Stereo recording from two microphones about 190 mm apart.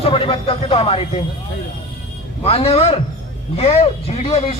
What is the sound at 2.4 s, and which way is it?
A man's voice, 30° left (ahead or behind).